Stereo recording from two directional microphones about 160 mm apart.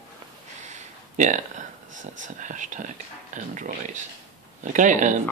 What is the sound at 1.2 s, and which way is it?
Speech, 50° right (ahead or behind).